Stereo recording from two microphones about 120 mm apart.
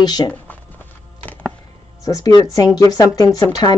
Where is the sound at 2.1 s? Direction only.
30° left (ahead or behind).